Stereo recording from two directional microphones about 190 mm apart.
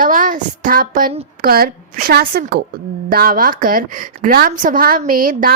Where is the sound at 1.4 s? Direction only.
50° right (ahead or behind).